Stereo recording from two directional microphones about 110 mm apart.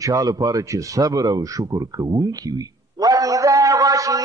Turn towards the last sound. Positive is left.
turn(degrees=-30)  # may be behind; listen again after turning